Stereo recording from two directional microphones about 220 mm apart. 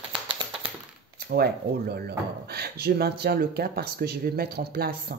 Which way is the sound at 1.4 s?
45° right (ahead or behind).